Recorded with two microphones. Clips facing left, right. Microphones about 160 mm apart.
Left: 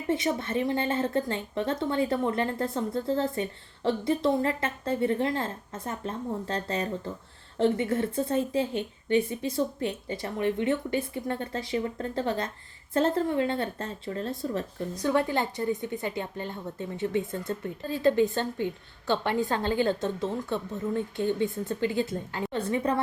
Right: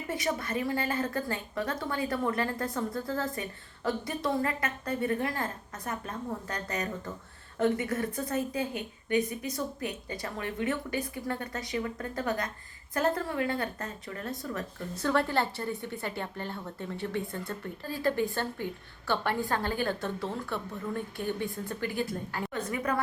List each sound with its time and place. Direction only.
0.1 s a woman's voice: 25° left (ahead or behind)
14.9 s a woman's voice: 15° left (ahead or behind)